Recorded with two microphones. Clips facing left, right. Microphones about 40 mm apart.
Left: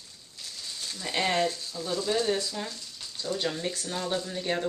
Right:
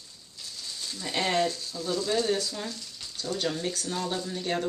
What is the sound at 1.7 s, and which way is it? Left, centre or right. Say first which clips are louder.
Frying: right 1 dB; centre.